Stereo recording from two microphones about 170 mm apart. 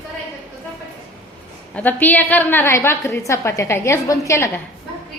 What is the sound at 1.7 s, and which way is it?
A woman's voice, 10° left (ahead or behind).